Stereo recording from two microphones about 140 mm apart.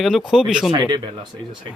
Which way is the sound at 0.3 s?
5° right (ahead or behind).